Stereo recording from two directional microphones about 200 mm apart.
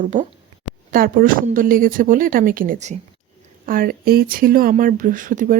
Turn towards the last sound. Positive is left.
turn(degrees=-40)  # may be behind; listen again after turning